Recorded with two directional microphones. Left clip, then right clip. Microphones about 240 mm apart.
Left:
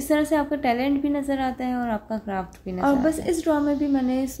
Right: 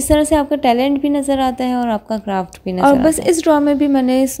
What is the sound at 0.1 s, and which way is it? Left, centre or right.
A woman's voice, right.